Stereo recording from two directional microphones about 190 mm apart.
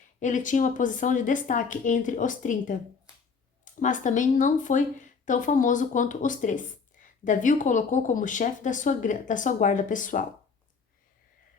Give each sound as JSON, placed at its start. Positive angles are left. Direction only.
{"t": 0.2, "sound": "a woman's voice", "side_deg": 40}